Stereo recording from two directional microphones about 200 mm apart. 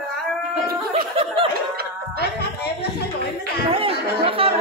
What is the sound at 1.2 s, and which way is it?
Snicker, 25° right (ahead or behind).